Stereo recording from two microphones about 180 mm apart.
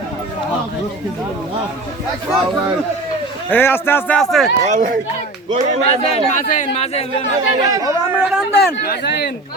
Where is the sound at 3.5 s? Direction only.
10° left (ahead or behind).